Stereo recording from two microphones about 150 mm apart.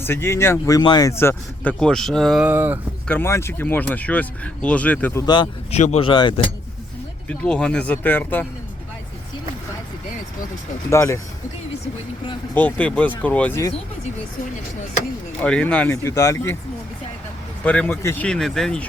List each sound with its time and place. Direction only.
0.0 s speech: 15° left (ahead or behind)
1.8 s speech: 5° left (ahead or behind)
2.5 s speech: 15° right (ahead or behind)
3.1 s speech: 15° left (ahead or behind)
5.2 s speech: 30° left (ahead or behind)
5.7 s speech: 50° left (ahead or behind)
6.0 s speech: 35° left (ahead or behind)
7.3 s speech: 5° left (ahead or behind)
10.8 s speech: 20° left (ahead or behind)
12.5 s speech: 10° left (ahead or behind)
15.4 s speech: 10° left (ahead or behind)
17.6 s speech: 10° left (ahead or behind)